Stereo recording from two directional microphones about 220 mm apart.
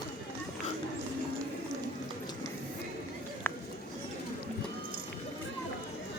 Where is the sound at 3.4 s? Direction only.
10° left (ahead or behind).